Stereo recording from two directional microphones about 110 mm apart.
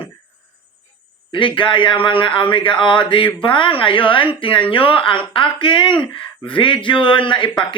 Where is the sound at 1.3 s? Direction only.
50° left (ahead or behind).